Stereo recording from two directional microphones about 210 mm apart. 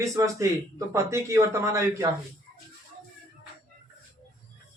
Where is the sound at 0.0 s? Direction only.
15° right (ahead or behind).